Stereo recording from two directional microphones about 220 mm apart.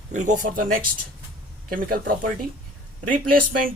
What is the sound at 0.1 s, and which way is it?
Speech, 35° right (ahead or behind).